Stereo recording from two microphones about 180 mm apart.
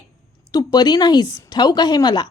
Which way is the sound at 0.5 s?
25° left (ahead or behind).